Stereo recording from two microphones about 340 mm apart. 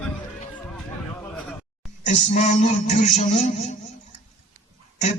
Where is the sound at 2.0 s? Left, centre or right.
Left.